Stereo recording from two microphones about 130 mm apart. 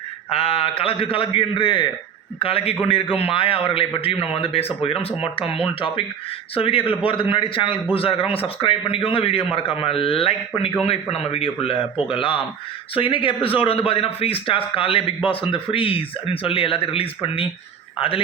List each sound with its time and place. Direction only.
0.3 s a man's voice: 50° left (ahead or behind)